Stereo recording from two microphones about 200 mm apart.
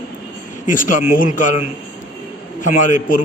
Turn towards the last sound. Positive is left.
turn(degrees=40)  # may be behind; listen again after turning